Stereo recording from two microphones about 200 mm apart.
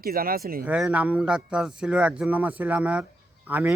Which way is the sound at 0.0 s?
45° right (ahead or behind).